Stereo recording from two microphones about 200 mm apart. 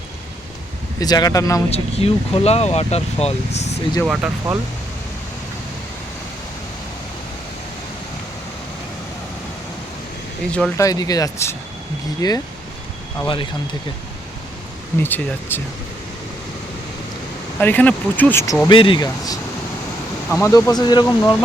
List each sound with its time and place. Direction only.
0.9 s speech: 20° left (ahead or behind)
1.7 s speech: 30° left (ahead or behind)
4.0 s speech: 5° right (ahead or behind)
10.8 s speech: 15° left (ahead or behind)
14.9 s speech: 10° left (ahead or behind)
17.6 s speech: 10° left (ahead or behind)
18.7 s speech: 25° left (ahead or behind)